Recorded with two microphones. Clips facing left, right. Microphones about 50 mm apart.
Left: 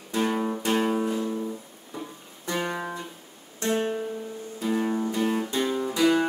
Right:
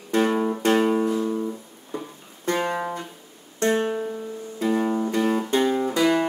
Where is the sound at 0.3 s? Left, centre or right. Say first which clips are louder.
Right 4 dB; centre.